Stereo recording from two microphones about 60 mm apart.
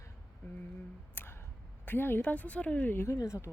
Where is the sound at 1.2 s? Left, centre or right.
Left.